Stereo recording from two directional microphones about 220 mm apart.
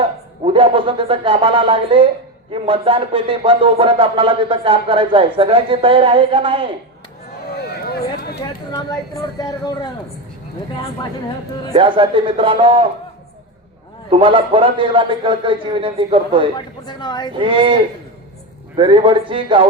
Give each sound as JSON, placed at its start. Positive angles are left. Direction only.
{"t": 0.0, "sound": "a man's voice", "side_deg": -25}
{"t": 7.5, "sound": "a sound", "side_deg": 45}
{"t": 9.4, "sound": "speech", "side_deg": 20}
{"t": 11.7, "sound": "speech", "side_deg": -25}
{"t": 14.1, "sound": "speech", "side_deg": -25}
{"t": 16.6, "sound": "a woman's voice", "side_deg": 20}
{"t": 17.3, "sound": "speech", "side_deg": -25}
{"t": 18.8, "sound": "speech", "side_deg": -25}